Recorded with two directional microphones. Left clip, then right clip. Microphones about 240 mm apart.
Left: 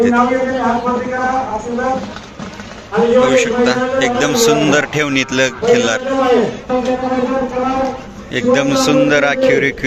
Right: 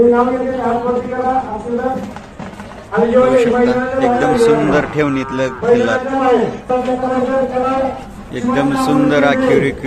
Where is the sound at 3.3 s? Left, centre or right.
Centre.